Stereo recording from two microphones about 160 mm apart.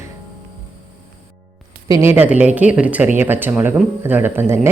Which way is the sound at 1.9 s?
15° right (ahead or behind).